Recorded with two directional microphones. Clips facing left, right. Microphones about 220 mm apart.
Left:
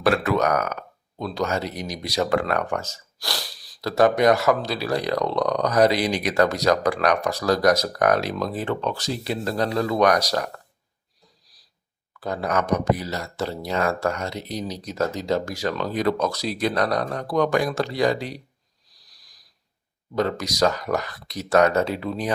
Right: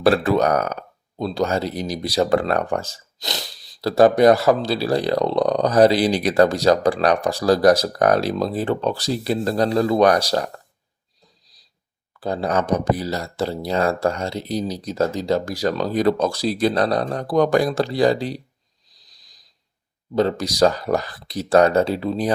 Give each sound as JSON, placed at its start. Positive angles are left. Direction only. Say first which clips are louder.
{"t": 0.0, "sound": "speech", "louder": "right 4 dB", "side_deg": -30}
{"t": 3.2, "sound": "sneeze", "louder": "right 2 dB", "side_deg": -20}
{"t": 3.8, "sound": "speech", "louder": "right 5 dB", "side_deg": -35}
{"t": 12.2, "sound": "speech", "louder": "right 3 dB", "side_deg": -30}
{"t": 18.9, "sound": "sniff", "louder": "right 1 dB", "side_deg": -20}
{"t": 20.1, "sound": "speech", "louder": "right 4 dB", "side_deg": -30}